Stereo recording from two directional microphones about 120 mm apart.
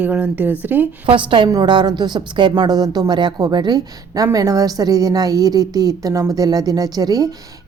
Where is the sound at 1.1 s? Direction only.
45° right (ahead or behind).